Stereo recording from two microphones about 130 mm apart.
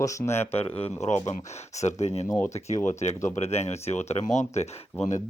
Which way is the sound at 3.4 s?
55° left (ahead or behind).